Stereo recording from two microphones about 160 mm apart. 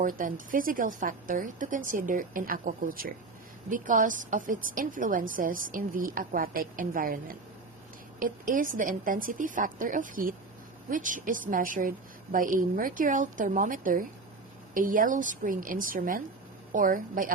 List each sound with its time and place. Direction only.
0.0 s a woman's voice: 55° right (ahead or behind)